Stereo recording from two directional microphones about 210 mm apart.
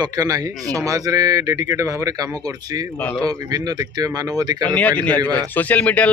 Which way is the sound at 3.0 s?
5° left (ahead or behind).